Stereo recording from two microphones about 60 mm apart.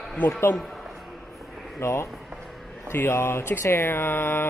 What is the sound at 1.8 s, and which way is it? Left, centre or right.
Speech, left.